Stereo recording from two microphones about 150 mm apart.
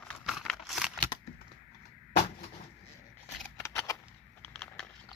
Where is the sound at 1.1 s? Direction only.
30° left (ahead or behind).